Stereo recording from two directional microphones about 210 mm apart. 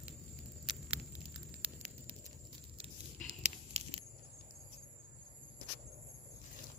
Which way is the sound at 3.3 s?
30° right (ahead or behind).